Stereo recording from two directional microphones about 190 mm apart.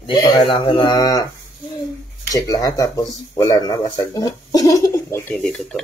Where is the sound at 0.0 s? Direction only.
20° left (ahead or behind).